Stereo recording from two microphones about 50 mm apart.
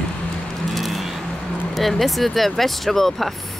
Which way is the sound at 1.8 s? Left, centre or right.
Centre.